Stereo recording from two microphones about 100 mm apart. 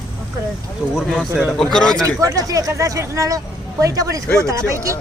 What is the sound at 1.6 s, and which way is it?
Speech, 5° left (ahead or behind).